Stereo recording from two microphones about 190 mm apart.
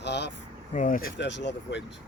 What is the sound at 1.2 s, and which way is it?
Speech, 70° left (ahead or behind).